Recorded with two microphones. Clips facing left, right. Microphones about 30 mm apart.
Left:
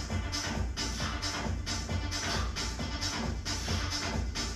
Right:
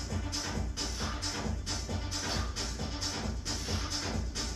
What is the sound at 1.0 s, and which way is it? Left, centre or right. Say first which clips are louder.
Music: left 1 dB; centre.